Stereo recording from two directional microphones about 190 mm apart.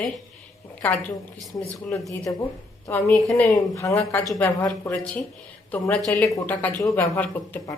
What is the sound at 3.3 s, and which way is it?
Speech, 15° left (ahead or behind).